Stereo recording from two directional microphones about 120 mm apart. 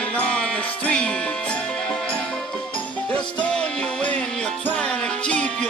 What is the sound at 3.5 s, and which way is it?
Music, 5° left (ahead or behind).